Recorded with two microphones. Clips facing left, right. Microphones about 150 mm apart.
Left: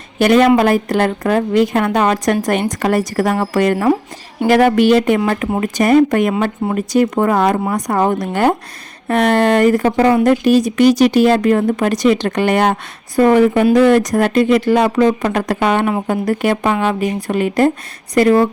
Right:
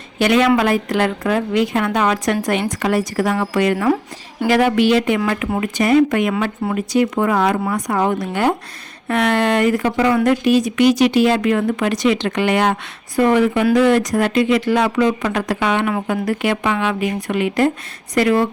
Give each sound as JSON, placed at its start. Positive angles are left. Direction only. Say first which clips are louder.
{"t": 0.2, "sound": "a woman's voice", "louder": "left 4 dB", "side_deg": 45}